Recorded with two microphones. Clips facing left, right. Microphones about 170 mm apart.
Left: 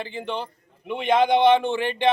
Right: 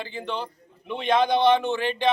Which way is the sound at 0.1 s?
20° left (ahead or behind).